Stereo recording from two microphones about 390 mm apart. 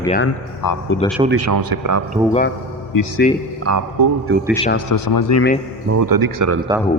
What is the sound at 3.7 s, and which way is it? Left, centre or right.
Speech, right.